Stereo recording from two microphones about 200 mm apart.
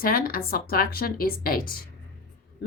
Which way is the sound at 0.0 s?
45° left (ahead or behind).